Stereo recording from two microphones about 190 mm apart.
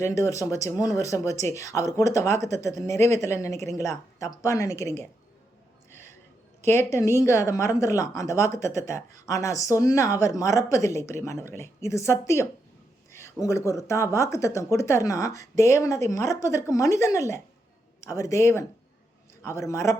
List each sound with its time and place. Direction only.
0.0 s speech: 15° left (ahead or behind)
6.7 s speech: 15° left (ahead or behind)
13.1 s a sound: 15° left (ahead or behind)
13.4 s speech: 15° left (ahead or behind)